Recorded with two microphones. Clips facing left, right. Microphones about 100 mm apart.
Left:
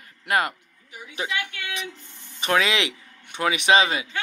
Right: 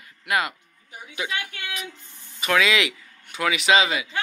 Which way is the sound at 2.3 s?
35° left (ahead or behind).